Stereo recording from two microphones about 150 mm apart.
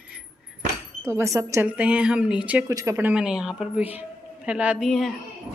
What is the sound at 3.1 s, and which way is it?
Speech, 5° right (ahead or behind).